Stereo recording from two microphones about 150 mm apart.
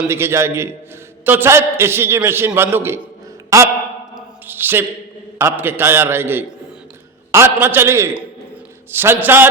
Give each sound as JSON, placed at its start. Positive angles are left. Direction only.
{"t": 0.1, "sound": "a man's voice", "side_deg": -15}
{"t": 4.1, "sound": "a sound", "side_deg": -15}
{"t": 5.4, "sound": "a man's voice", "side_deg": -15}